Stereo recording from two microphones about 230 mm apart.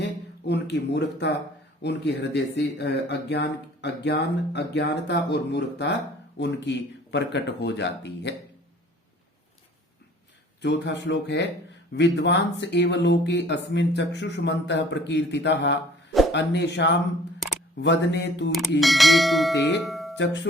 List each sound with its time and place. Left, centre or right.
0.0 s speech: left
10.6 s speech: left
18.8 s bell: centre
19.8 s music: centre
20.1 s speech: left